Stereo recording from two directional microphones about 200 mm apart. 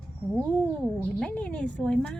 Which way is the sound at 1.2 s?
5° left (ahead or behind).